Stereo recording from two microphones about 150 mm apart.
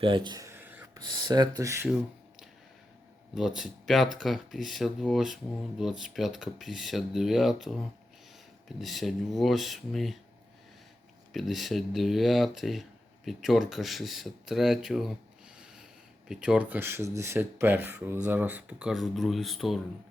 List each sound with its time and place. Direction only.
0.0 s speech: 30° right (ahead or behind)
0.4 s a sound: 15° right (ahead or behind)
0.9 s speech: 30° right (ahead or behind)
3.3 s speech: 5° right (ahead or behind)
8.8 s speech: centre (ahead or behind)
11.3 s speech: centre (ahead or behind)
16.3 s speech: 5° right (ahead or behind)